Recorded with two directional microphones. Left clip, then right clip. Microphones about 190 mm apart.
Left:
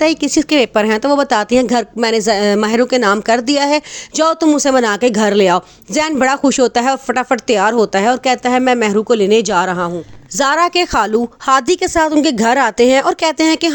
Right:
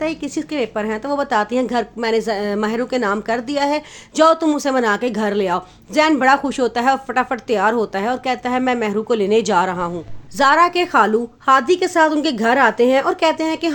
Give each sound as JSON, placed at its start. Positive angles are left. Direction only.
{"t": 0.0, "sound": "speech", "side_deg": 50}
{"t": 10.3, "sound": "a woman's voice", "side_deg": 40}
{"t": 10.9, "sound": "speech", "side_deg": 55}